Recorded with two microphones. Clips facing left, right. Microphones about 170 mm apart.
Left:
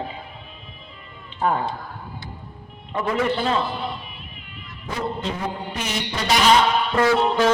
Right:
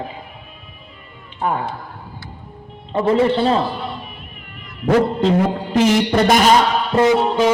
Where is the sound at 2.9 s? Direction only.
30° right (ahead or behind).